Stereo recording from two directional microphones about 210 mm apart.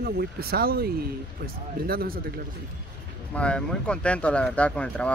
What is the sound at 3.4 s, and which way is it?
Speech, 5° left (ahead or behind).